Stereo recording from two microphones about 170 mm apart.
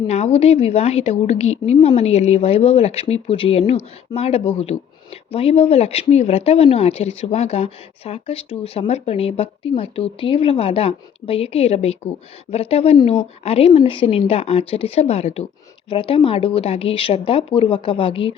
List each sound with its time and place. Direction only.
0.1 s speech: 40° left (ahead or behind)